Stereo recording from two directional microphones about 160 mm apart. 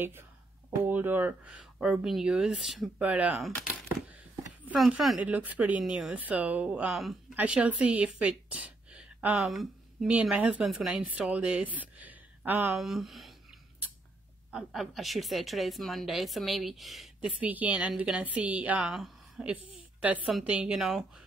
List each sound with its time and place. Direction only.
0.7 s speech: 10° right (ahead or behind)
3.9 s a sound: 15° right (ahead or behind)
4.7 s a woman's voice: centre (ahead or behind)
12.7 s a woman's voice: centre (ahead or behind)
14.5 s a woman's voice: 5° right (ahead or behind)